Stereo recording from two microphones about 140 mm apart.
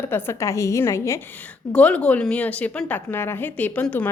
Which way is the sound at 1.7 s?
10° left (ahead or behind).